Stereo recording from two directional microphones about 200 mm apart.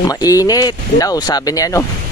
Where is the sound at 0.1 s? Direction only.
15° left (ahead or behind).